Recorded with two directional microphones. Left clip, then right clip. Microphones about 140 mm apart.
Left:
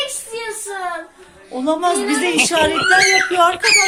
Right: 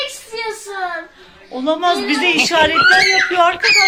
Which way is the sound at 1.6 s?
10° left (ahead or behind).